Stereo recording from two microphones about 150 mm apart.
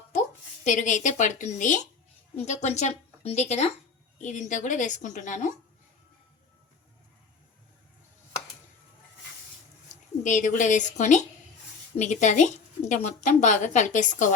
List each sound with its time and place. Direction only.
0.1 s speech: 55° left (ahead or behind)
2.3 s speech: 45° left (ahead or behind)
10.2 s speech: 60° left (ahead or behind)